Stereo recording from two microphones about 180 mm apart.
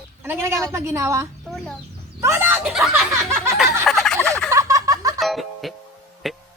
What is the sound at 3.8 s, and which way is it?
Turkey, centre (ahead or behind).